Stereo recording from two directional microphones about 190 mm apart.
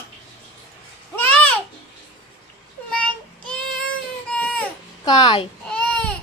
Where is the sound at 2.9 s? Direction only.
5° left (ahead or behind).